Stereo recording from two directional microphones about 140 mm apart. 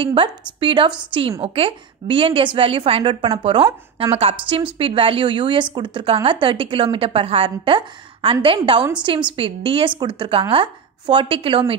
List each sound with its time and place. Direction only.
0.0 s a woman's voice: 40° right (ahead or behind)